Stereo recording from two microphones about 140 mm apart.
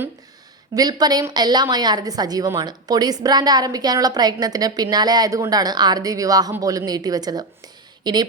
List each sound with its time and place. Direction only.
0.7 s a woman's voice: 25° right (ahead or behind)